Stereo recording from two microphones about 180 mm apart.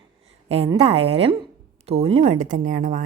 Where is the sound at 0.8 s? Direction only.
35° right (ahead or behind).